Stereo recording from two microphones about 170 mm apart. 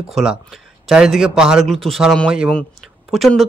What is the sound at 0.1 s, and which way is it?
Speech, 5° right (ahead or behind).